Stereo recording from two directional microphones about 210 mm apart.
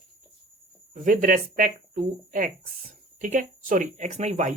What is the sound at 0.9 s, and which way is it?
Speech, 40° right (ahead or behind).